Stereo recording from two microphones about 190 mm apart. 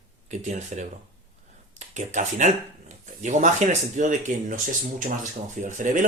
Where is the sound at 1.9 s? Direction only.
40° right (ahead or behind).